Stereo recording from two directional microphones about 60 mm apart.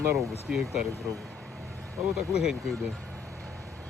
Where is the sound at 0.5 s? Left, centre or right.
Centre.